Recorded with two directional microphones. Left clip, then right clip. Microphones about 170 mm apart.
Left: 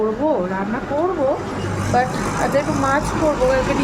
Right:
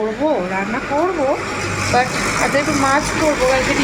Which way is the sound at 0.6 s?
50° left (ahead or behind).